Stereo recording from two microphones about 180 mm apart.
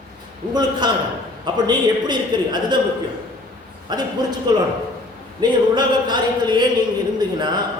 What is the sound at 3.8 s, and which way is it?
Speech, 25° right (ahead or behind).